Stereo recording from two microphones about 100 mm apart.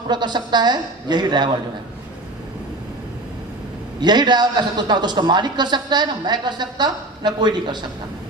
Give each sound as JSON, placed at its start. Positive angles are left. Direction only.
{"t": 0.1, "sound": "a man's voice", "side_deg": -45}
{"t": 4.0, "sound": "a man's voice", "side_deg": -45}